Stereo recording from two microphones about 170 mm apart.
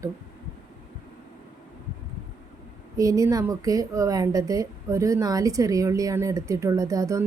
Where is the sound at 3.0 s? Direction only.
20° right (ahead or behind).